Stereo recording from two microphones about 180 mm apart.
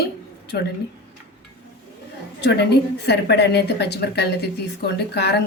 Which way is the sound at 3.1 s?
70° left (ahead or behind).